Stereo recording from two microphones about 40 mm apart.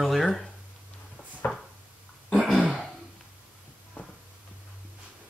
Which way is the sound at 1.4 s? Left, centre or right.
Left.